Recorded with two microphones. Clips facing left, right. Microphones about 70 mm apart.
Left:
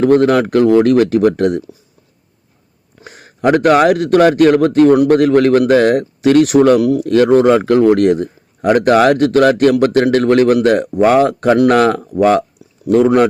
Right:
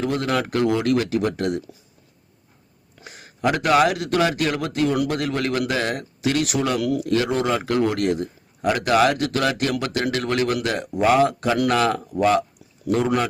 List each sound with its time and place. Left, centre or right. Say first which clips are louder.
0.0 s a man's voice: left 12 dB; left
3.0 s a man's voice: left 7 dB; left